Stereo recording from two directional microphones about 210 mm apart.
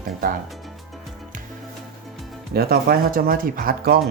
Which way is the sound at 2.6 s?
45° right (ahead or behind).